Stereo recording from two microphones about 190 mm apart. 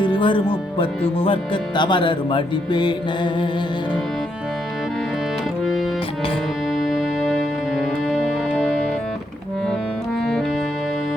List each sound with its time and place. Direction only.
0.0 s speech: 25° left (ahead or behind)
6.7 s music: centre (ahead or behind)